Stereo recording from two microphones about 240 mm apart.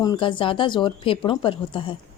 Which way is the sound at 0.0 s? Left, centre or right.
Centre.